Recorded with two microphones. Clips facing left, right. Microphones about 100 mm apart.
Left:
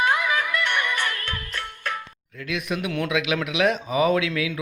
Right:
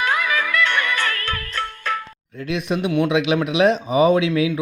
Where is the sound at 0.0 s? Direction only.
90° right.